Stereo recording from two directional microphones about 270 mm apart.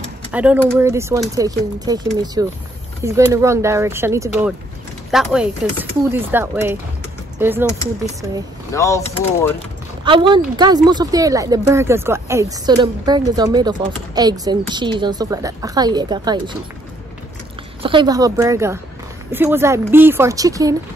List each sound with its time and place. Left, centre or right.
0.3 s speech: centre
8.7 s speech: centre
10.0 s speech: centre
17.8 s speech: centre